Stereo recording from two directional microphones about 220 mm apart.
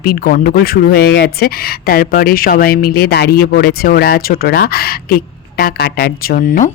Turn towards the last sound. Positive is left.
turn(degrees=40)  # may be behind; listen again after turning